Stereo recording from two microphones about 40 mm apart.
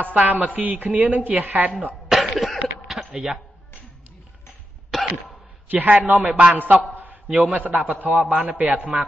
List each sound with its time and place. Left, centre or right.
0.0 s chopping: right
0.6 s a man's voice: right
2.0 s cough: centre
3.0 s a sound: centre
4.9 s cough: centre
5.7 s a man's voice: right
6.2 s a man's voice: right
7.5 s a man's voice: right